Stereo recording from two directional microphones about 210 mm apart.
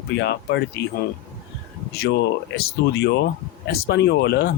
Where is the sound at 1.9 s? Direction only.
50° left (ahead or behind).